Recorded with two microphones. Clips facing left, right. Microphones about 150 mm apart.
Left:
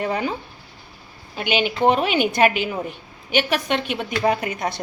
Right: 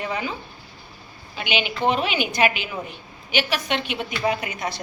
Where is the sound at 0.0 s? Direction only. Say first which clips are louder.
Left 4 dB; 45° left (ahead or behind).